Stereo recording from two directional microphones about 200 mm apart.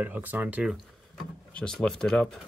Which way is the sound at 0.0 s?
10° right (ahead or behind).